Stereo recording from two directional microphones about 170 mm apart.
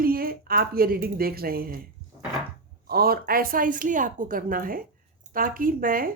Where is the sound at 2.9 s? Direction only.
65° right (ahead or behind).